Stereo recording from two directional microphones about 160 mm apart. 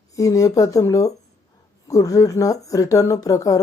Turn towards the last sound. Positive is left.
turn(degrees=20)  # may be behind; listen again after turning